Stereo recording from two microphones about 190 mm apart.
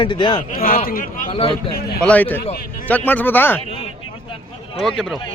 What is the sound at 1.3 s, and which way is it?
Speech, 30° left (ahead or behind).